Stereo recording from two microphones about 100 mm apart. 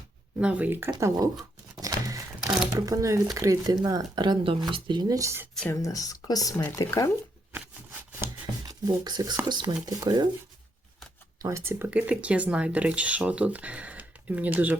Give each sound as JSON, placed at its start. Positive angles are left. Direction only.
{"t": 0.3, "sound": "speech", "side_deg": -10}
{"t": 0.9, "sound": "speech", "side_deg": -35}
{"t": 1.8, "sound": "a sound", "side_deg": -35}
{"t": 2.4, "sound": "a sound", "side_deg": -5}
{"t": 2.7, "sound": "speech", "side_deg": -35}
{"t": 5.7, "sound": "speech", "side_deg": 35}
{"t": 8.6, "sound": "speech", "side_deg": -40}
{"t": 11.4, "sound": "speech", "side_deg": -30}
{"t": 11.9, "sound": "speech", "side_deg": -10}